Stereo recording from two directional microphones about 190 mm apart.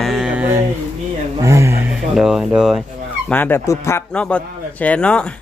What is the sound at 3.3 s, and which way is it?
A man's voice, 10° left (ahead or behind).